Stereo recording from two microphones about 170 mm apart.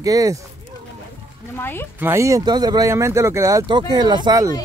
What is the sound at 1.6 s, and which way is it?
Speech, 15° left (ahead or behind).